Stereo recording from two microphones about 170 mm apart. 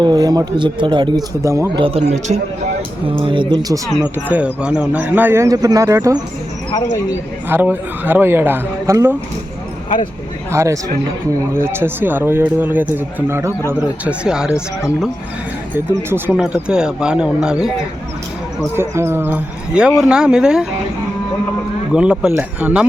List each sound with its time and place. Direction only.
0.0 s speech: 25° right (ahead or behind)
1.8 s a man's voice: 35° right (ahead or behind)
3.1 s speech: 30° right (ahead or behind)
4.3 s speech: 10° right (ahead or behind)
7.4 s speech: 10° right (ahead or behind)
10.5 s speech: 15° right (ahead or behind)
16.0 s speech: 10° right (ahead or behind)
18.8 s speech: 15° right (ahead or behind)
21.9 s speech: 5° right (ahead or behind)